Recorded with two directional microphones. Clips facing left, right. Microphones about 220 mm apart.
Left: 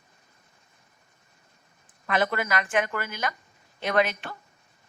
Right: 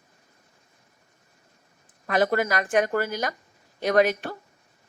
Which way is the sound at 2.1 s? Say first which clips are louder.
Right 4 dB; 40° right (ahead or behind).